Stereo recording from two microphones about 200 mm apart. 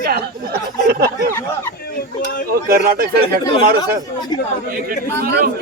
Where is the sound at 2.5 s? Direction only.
50° right (ahead or behind).